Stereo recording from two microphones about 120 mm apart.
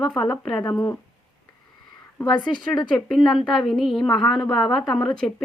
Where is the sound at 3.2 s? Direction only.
5° left (ahead or behind).